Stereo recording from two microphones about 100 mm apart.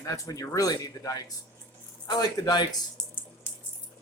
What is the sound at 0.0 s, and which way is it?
Speech, 35° left (ahead or behind).